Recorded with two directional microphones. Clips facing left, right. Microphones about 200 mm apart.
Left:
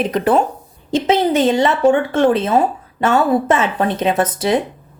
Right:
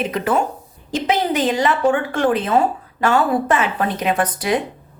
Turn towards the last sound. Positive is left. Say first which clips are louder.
# left 3 dB
turn(degrees=25)  # may be behind; listen again after turning